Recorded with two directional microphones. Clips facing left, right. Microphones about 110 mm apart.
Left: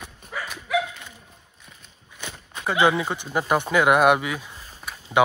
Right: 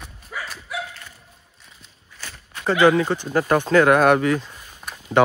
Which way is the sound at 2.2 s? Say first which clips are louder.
Left 2 dB; 20° left (ahead or behind).